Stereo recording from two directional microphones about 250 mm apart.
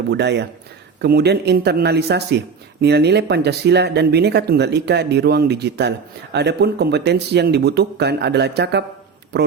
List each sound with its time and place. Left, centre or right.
0.1 s speech: right